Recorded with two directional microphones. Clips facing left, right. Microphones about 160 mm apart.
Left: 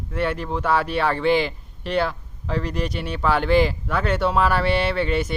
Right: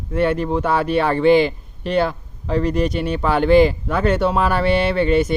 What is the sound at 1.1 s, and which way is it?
Speech, 50° right (ahead or behind).